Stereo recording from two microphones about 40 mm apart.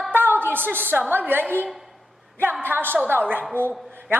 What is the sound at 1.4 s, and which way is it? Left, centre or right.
Speech, left.